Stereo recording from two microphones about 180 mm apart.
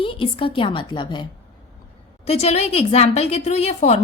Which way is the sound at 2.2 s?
35° left (ahead or behind).